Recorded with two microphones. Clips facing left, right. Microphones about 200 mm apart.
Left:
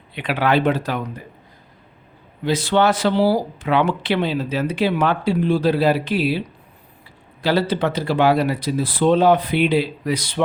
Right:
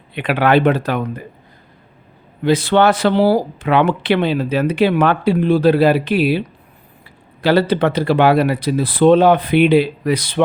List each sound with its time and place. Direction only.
0.1 s speech: 55° right (ahead or behind)
2.4 s speech: 60° right (ahead or behind)
7.4 s speech: 60° right (ahead or behind)